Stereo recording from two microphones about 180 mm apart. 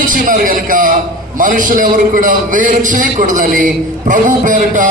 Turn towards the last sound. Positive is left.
turn(degrees=-45)  # may be behind; listen again after turning